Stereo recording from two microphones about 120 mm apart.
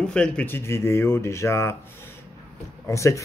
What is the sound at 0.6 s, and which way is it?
Speech, 20° left (ahead or behind).